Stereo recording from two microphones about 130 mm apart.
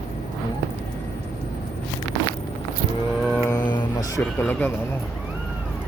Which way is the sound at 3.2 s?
5° left (ahead or behind).